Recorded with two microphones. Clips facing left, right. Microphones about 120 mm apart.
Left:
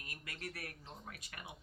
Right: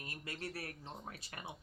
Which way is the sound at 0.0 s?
30° right (ahead or behind).